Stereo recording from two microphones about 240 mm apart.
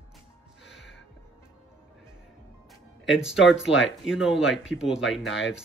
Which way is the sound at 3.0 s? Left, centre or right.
Centre.